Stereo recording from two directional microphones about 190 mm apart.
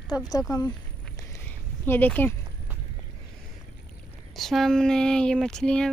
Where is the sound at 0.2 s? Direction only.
20° left (ahead or behind).